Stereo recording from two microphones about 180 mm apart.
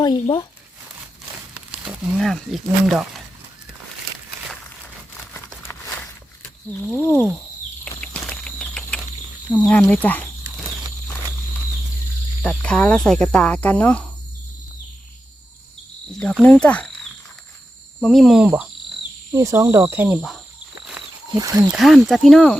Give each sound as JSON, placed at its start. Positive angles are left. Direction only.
{"t": 0.0, "sound": "speech", "side_deg": 25}
{"t": 1.5, "sound": "speech", "side_deg": -5}
{"t": 6.4, "sound": "wild animals", "side_deg": 5}
{"t": 8.0, "sound": "a sound", "side_deg": 5}
{"t": 9.5, "sound": "speech", "side_deg": 10}
{"t": 12.4, "sound": "speech", "side_deg": 5}
{"t": 16.4, "sound": "speech", "side_deg": 5}
{"t": 18.0, "sound": "speech", "side_deg": 0}
{"t": 19.3, "sound": "speech", "side_deg": -20}
{"t": 21.0, "sound": "a sound", "side_deg": -5}
{"t": 21.3, "sound": "speech", "side_deg": -20}
{"t": 21.7, "sound": "speech", "side_deg": 0}